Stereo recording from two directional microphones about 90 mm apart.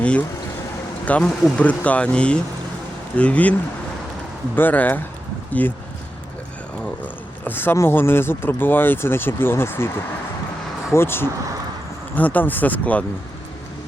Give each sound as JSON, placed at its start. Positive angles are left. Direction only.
{"t": 0.0, "sound": "speech", "side_deg": 15}
{"t": 4.5, "sound": "speech", "side_deg": 20}
{"t": 7.4, "sound": "speech", "side_deg": 25}